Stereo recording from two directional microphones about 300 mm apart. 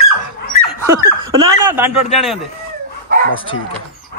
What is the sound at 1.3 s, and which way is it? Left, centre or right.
A man's voice, centre.